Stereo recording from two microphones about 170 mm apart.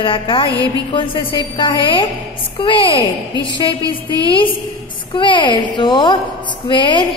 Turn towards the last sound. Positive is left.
turn(degrees=30)  # may be behind; listen again after turning